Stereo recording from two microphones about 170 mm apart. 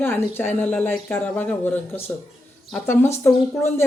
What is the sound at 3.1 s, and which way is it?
Speech, 15° left (ahead or behind).